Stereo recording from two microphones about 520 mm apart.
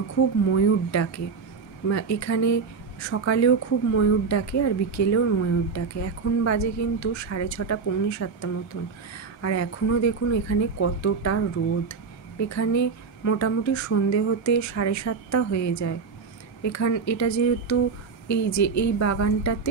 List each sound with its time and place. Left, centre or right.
0.5 s speech: left